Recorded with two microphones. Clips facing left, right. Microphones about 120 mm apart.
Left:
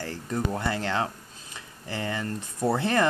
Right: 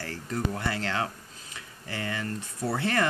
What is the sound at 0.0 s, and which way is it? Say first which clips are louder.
Speech: left 2 dB; 20° left (ahead or behind).